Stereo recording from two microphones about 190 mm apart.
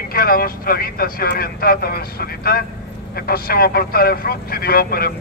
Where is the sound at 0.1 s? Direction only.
50° left (ahead or behind).